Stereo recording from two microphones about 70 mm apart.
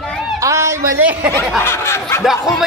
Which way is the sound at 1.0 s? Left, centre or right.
Right.